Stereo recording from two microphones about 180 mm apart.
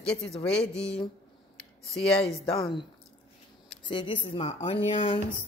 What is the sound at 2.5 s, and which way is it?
Speech, centre (ahead or behind).